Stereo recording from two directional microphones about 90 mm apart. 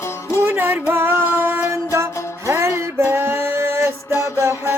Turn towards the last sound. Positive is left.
turn(degrees=-25)  # may be behind; listen again after turning